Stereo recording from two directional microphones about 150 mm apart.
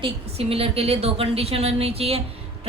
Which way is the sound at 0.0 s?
40° right (ahead or behind).